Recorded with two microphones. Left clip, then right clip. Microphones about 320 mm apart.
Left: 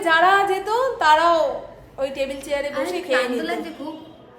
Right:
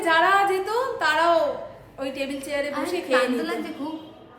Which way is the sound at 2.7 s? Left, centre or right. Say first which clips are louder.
Left 2 dB; centre.